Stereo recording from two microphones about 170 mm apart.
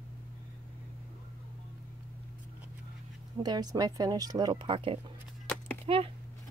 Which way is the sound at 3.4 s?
25° right (ahead or behind).